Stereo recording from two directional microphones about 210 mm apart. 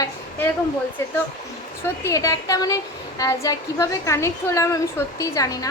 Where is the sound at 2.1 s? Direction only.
15° left (ahead or behind).